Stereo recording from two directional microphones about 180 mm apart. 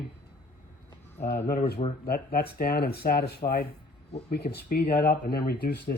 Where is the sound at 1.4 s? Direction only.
60° left (ahead or behind).